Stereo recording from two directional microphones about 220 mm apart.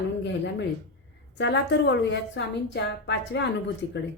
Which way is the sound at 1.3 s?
50° left (ahead or behind).